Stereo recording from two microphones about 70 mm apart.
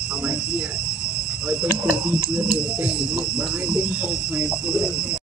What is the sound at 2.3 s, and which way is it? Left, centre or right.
Music, centre.